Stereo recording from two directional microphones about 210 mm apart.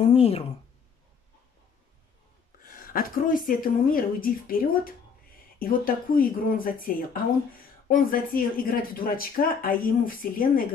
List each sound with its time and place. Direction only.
0.0 s speech: 25° left (ahead or behind)
2.6 s a woman's voice: 40° left (ahead or behind)